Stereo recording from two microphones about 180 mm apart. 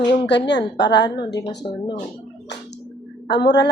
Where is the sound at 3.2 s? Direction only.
70° left (ahead or behind).